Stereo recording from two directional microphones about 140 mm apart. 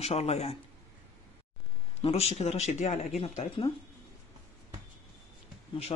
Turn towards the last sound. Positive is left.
turn(degrees=35)  # may be behind; listen again after turning